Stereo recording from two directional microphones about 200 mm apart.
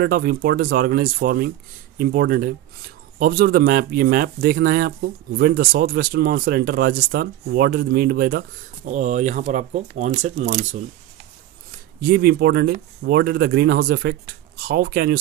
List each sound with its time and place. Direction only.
0.0 s speech: 50° right (ahead or behind)
8.9 s speech: 40° right (ahead or behind)
12.0 s speech: 50° right (ahead or behind)